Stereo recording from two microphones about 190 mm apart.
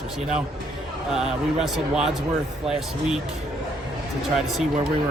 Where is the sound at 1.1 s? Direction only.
Centre (ahead or behind).